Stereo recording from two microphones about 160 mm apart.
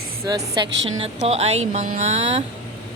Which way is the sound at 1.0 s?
40° right (ahead or behind).